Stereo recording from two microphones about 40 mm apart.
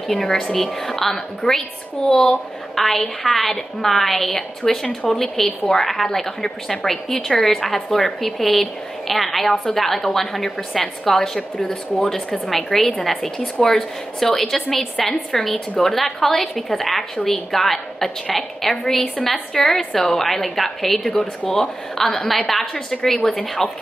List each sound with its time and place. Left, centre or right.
0.1 s speech: centre
2.0 s speech: left
2.3 s a woman's voice: centre